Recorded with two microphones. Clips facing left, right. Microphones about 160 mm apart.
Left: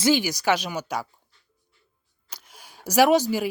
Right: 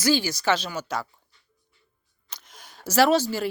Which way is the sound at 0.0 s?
20° left (ahead or behind).